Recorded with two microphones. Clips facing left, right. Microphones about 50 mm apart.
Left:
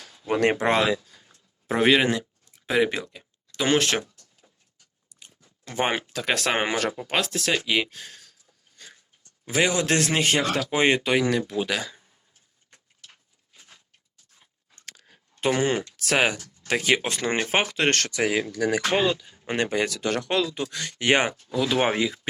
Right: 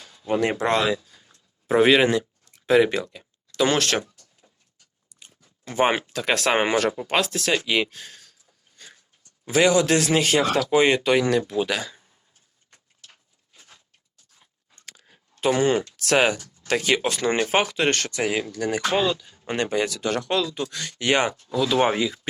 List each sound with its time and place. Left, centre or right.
0.6 s speech: centre
1.6 s speech: centre
5.0 s speech: centre
9.5 s speech: left
9.8 s a man's voice: left
11.0 s speech: centre
12.7 s a sound: centre
15.0 s a sound: left
15.6 s speech: centre; by 17.9 s left
18.3 s speech: centre
18.9 s speech: left
19.4 s speech: centre